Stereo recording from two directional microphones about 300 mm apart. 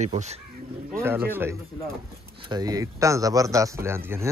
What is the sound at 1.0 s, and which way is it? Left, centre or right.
Speech, centre.